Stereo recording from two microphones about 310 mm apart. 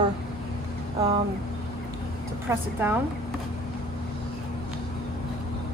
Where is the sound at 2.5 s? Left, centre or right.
Centre.